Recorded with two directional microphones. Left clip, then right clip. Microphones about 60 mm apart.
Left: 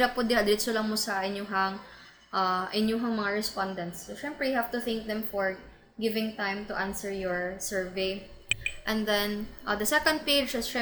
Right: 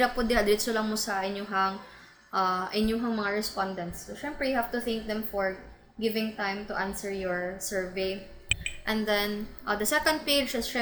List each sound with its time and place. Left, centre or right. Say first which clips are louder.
0.2 s a woman's voice: even; left